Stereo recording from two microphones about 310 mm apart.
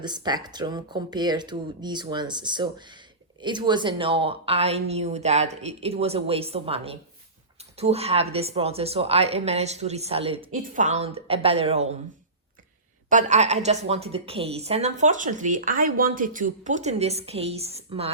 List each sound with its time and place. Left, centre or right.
0.0 s a woman's voice: centre
13.1 s a woman's voice: right